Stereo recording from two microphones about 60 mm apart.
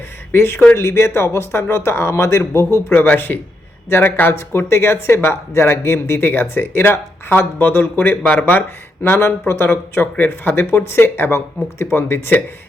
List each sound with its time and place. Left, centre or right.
0.3 s speech: left
2.9 s speech: left